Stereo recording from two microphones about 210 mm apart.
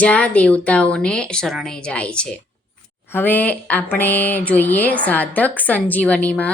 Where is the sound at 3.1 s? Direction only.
10° left (ahead or behind).